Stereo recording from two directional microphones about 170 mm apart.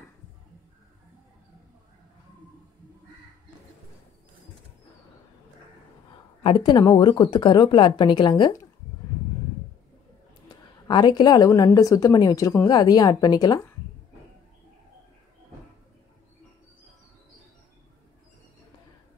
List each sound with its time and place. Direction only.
6.4 s a woman's voice: 30° left (ahead or behind)
10.9 s a woman's voice: 25° left (ahead or behind)